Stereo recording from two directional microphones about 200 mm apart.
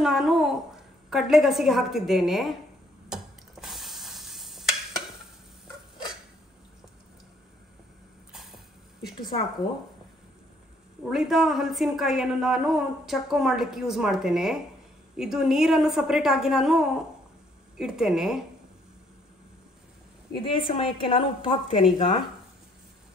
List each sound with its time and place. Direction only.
0.0 s a child's voice: centre (ahead or behind)
3.1 s a sound: centre (ahead or behind)
8.3 s vehicle: centre (ahead or behind)
11.1 s a man's voice: centre (ahead or behind)
20.5 s a woman's voice: 25° left (ahead or behind)